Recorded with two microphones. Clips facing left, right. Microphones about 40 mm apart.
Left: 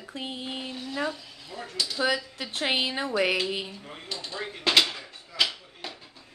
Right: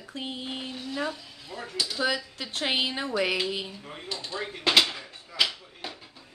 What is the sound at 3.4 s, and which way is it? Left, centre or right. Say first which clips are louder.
Drawer open or close: even; centre.